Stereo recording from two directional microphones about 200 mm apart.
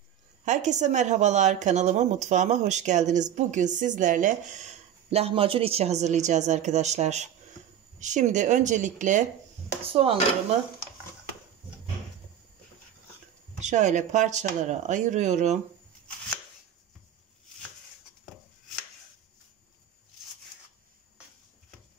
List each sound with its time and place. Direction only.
0.5 s a woman's voice: 35° right (ahead or behind)
13.6 s a woman's voice: 35° right (ahead or behind)